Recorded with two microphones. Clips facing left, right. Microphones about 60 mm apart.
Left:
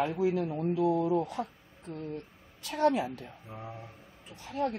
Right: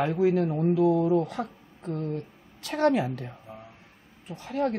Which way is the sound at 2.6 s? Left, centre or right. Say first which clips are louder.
Right 3 dB; right.